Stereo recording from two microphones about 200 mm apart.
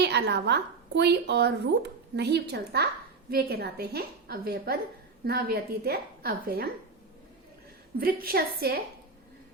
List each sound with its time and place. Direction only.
0.0 s a woman's voice: 55° right (ahead or behind)
7.9 s a woman's voice: 50° right (ahead or behind)